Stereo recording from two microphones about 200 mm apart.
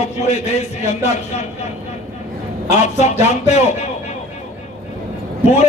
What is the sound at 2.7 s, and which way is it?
A man's voice, 35° left (ahead or behind).